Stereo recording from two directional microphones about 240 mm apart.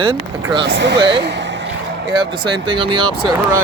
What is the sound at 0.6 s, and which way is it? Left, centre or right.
Speech, right.